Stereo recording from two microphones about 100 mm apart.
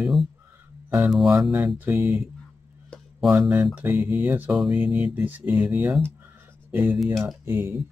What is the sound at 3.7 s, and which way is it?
Speech, 20° right (ahead or behind).